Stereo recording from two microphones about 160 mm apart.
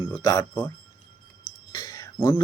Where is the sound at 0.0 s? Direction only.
25° left (ahead or behind).